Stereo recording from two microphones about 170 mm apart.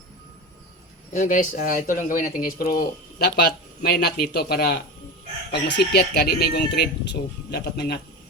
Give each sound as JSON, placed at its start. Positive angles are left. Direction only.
{"t": 1.1, "sound": "speech", "side_deg": 50}
{"t": 5.5, "sound": "speech", "side_deg": 85}